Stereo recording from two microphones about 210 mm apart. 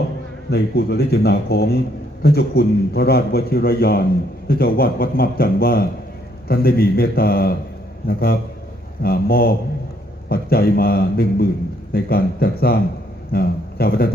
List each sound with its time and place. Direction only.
0.5 s a man's voice: 50° left (ahead or behind)